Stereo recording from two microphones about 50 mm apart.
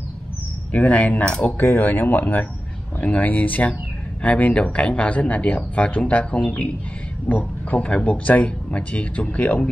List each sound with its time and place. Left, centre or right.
0.7 s speech: left
1.6 s speech: left